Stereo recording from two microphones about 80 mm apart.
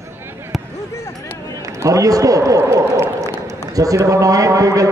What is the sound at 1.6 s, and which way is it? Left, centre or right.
Run, right.